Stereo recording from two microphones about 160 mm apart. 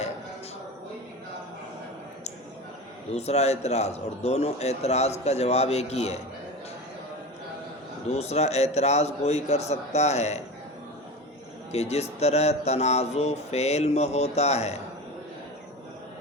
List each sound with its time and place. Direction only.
3.2 s a man's voice: 40° left (ahead or behind)
8.1 s speech: 40° left (ahead or behind)
11.7 s speech: 40° left (ahead or behind)